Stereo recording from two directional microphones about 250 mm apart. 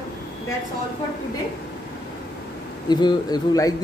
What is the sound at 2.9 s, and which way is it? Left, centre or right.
Speech, centre.